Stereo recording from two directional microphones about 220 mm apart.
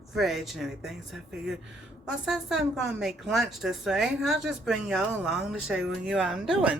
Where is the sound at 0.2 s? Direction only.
Centre (ahead or behind).